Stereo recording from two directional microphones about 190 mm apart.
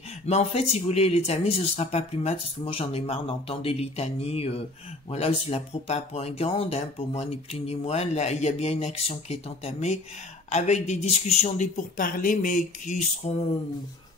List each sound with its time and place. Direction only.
0.3 s speech: 35° left (ahead or behind)